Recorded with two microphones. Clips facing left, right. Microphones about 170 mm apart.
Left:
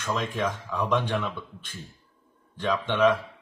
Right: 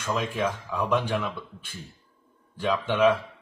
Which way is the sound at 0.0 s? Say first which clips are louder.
Right 1 dB; 10° right (ahead or behind).